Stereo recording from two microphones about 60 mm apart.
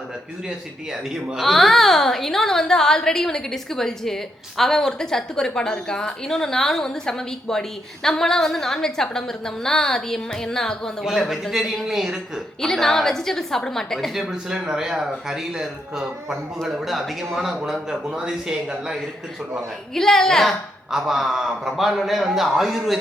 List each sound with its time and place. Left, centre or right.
1.4 s a woman's voice: centre
11.0 s a woman's voice: centre
12.6 s a woman's voice: centre
19.9 s a woman's voice: centre
20.9 s a woman's voice: centre